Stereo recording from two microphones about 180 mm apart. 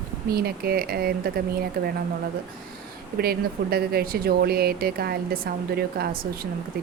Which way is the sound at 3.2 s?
60° right (ahead or behind).